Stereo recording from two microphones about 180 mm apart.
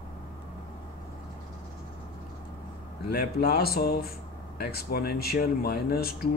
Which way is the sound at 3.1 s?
60° left (ahead or behind).